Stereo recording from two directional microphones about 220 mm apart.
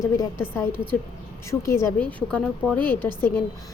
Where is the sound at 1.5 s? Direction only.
10° left (ahead or behind).